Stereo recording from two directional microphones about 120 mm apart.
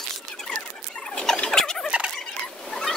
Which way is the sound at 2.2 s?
5° left (ahead or behind).